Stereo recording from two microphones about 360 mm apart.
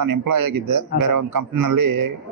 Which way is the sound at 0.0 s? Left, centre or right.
Right.